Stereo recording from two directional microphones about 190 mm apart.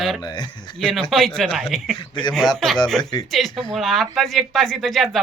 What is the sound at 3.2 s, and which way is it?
Speech, centre (ahead or behind).